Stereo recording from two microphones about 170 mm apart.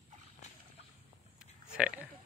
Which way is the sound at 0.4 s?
40° left (ahead or behind).